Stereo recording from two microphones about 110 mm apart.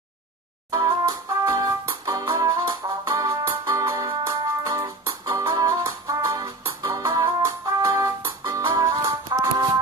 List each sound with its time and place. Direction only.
0.7 s music: 35° right (ahead or behind)